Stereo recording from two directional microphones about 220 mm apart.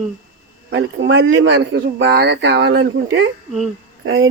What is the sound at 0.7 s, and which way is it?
Speech, 55° right (ahead or behind).